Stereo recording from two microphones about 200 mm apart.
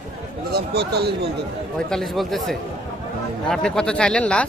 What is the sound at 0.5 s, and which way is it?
Speech, 55° right (ahead or behind).